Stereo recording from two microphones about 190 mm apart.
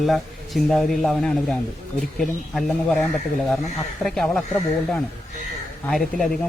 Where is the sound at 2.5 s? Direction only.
Centre (ahead or behind).